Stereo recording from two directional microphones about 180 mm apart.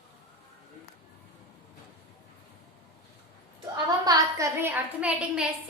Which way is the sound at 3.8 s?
20° right (ahead or behind).